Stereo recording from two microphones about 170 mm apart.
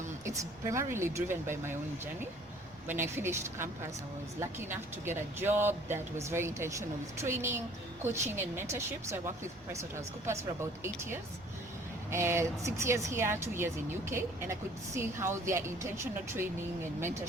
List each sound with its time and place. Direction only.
0.3 s speech: 15° right (ahead or behind)
3.2 s speech: 15° right (ahead or behind)